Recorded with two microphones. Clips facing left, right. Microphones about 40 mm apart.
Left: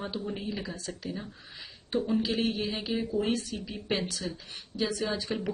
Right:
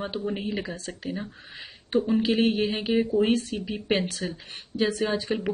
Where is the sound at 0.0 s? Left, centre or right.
Right.